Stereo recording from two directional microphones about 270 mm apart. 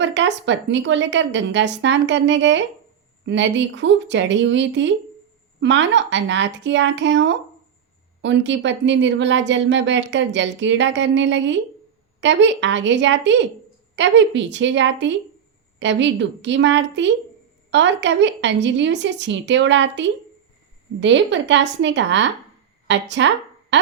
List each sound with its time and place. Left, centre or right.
0.0 s speech: right